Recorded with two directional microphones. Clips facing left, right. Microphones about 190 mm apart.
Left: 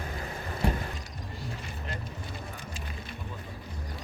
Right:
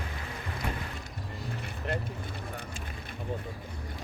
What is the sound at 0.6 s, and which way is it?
Mechanisms, 30° left (ahead or behind).